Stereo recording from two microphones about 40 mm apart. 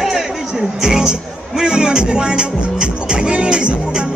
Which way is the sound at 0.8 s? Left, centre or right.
Centre.